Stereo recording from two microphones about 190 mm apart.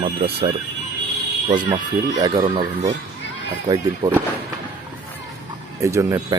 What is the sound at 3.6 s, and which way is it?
Speech, 20° right (ahead or behind).